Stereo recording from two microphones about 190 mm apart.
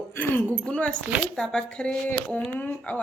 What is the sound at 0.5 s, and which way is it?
Speech, 5° left (ahead or behind).